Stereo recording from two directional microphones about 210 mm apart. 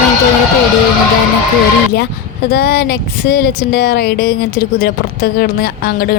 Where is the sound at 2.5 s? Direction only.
45° left (ahead or behind).